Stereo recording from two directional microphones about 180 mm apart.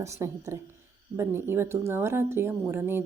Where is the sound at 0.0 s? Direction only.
15° right (ahead or behind).